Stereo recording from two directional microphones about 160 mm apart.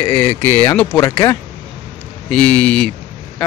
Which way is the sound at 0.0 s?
10° left (ahead or behind).